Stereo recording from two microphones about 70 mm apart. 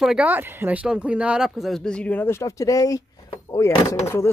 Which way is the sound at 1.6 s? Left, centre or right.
Centre.